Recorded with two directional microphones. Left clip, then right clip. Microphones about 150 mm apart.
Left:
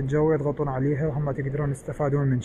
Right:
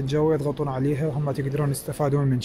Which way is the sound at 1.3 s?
40° right (ahead or behind).